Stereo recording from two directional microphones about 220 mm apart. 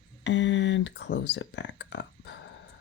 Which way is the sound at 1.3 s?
55° left (ahead or behind).